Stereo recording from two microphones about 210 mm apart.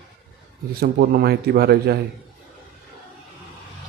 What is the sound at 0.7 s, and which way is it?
Speech, 45° right (ahead or behind).